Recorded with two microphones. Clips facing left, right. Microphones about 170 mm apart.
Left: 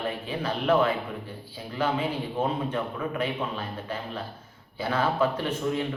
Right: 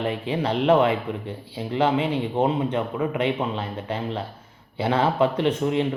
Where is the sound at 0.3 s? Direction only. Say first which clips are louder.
Right 6 dB; 25° right (ahead or behind).